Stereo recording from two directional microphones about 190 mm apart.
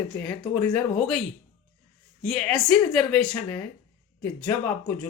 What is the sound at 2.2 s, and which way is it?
A woman's voice, 5° left (ahead or behind).